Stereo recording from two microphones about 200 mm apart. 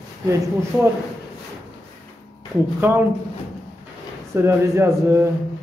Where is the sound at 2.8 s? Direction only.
10° right (ahead or behind).